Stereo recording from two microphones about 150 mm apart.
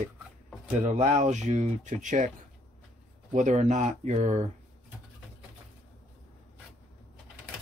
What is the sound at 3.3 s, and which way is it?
Speech, 55° right (ahead or behind).